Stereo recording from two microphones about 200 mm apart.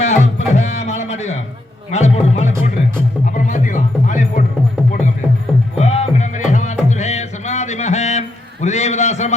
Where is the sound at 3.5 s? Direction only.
40° left (ahead or behind).